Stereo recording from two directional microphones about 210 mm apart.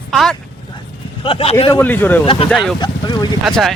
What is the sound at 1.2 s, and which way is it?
Speech, 25° left (ahead or behind).